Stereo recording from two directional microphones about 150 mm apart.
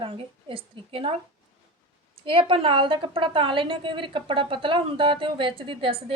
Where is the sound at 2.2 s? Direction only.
35° right (ahead or behind).